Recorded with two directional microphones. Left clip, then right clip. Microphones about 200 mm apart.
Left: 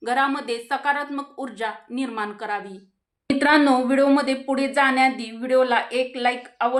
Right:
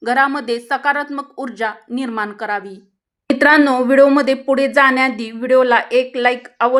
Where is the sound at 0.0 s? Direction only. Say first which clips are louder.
Right 6 dB; 40° right (ahead or behind).